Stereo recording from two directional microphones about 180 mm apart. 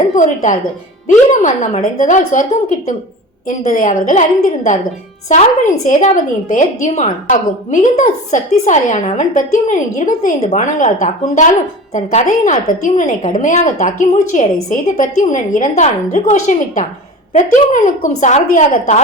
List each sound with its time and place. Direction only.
0.2 s a woman's voice: 45° left (ahead or behind)